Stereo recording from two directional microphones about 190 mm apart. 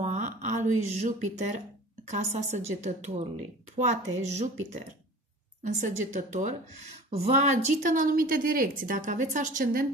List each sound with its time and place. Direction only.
0.0 s a sound: 40° right (ahead or behind)
2.0 s a woman's voice: 35° right (ahead or behind)
5.6 s a woman's voice: 40° right (ahead or behind)